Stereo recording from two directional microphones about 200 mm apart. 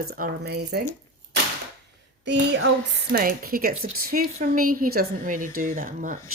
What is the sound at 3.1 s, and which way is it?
A woman's voice, 45° right (ahead or behind).